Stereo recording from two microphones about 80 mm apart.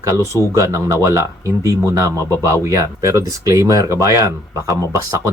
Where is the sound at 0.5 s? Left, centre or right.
Right.